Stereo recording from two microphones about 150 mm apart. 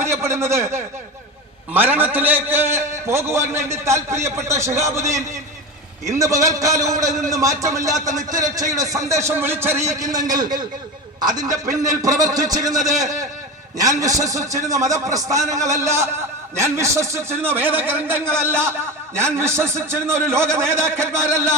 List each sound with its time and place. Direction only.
0.0 s a man's voice: 15° right (ahead or behind)